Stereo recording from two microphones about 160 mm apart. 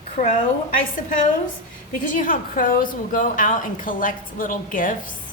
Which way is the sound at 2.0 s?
55° left (ahead or behind).